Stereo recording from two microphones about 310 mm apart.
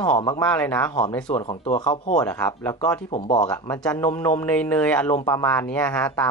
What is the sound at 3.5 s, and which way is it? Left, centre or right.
Speech, centre.